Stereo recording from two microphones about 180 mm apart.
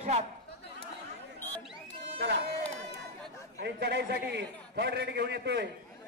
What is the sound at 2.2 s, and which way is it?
Speech, 65° right (ahead or behind).